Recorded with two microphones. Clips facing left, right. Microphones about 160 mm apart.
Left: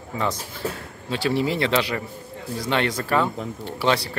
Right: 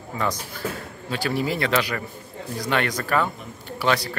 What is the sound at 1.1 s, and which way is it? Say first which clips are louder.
Speech: left 2 dB; 25° left (ahead or behind).